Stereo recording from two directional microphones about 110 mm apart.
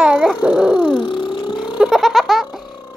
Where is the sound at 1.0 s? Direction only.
50° left (ahead or behind).